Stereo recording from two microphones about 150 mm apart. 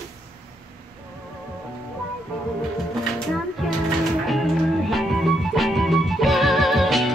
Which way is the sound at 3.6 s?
Centre (ahead or behind).